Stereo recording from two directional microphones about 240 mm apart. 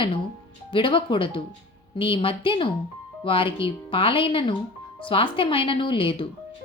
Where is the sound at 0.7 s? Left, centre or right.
Left.